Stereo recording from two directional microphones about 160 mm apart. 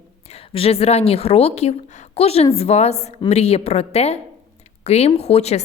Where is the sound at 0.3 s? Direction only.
40° left (ahead or behind).